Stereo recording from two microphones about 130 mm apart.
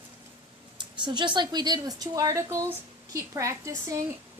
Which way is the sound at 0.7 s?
35° right (ahead or behind).